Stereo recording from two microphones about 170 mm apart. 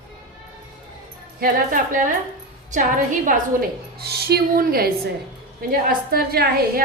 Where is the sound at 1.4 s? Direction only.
55° right (ahead or behind).